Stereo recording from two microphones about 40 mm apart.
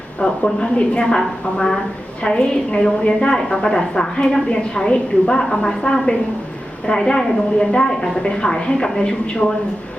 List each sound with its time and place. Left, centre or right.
0.2 s a woman's voice: left